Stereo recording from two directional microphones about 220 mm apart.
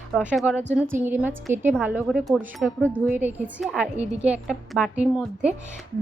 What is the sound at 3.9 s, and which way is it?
Speech, 30° right (ahead or behind).